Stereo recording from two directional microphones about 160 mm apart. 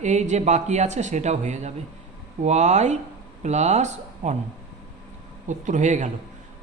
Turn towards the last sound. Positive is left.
turn(degrees=-50)  # may be behind; listen again after turning